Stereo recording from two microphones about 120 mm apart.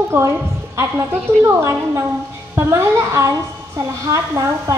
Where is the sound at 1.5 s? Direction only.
25° right (ahead or behind).